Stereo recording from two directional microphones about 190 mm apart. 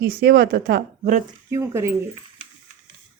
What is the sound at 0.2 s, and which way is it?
Speech, 55° right (ahead or behind).